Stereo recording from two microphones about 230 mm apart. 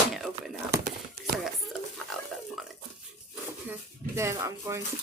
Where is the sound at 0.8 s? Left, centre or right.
Right.